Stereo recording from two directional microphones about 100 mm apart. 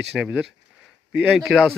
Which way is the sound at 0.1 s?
10° right (ahead or behind).